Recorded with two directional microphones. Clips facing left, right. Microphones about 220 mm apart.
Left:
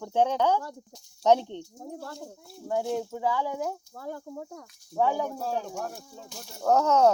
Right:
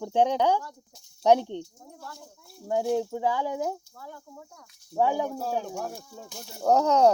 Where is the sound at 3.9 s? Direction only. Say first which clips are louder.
Left 7 dB; 45° left (ahead or behind).